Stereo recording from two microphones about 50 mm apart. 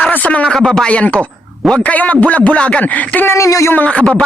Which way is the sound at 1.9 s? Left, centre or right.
Left.